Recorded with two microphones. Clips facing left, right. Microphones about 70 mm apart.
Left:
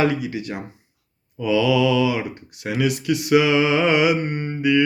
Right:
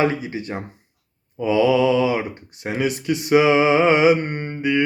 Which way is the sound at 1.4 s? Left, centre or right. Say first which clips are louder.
Right 2 dB; right.